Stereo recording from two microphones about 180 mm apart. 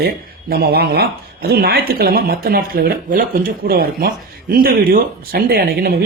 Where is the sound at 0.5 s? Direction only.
60° right (ahead or behind).